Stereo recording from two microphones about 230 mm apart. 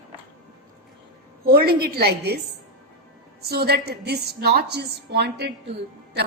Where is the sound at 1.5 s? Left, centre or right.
Right.